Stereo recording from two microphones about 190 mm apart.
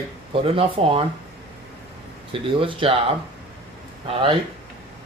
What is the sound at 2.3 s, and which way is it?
Speech, 25° right (ahead or behind).